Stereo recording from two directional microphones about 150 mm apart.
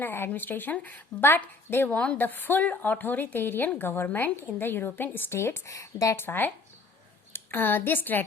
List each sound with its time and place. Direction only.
0.0 s a woman's voice: 15° left (ahead or behind)